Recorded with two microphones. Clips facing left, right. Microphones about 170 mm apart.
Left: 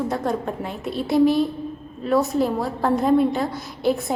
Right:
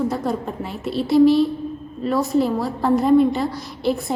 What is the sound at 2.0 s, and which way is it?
A woman's voice, centre (ahead or behind).